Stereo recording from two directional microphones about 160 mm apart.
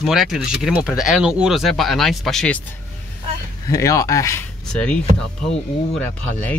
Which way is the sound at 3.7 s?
20° left (ahead or behind).